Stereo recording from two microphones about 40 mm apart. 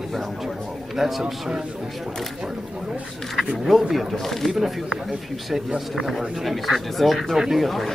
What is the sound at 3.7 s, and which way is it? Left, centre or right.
Speech, centre.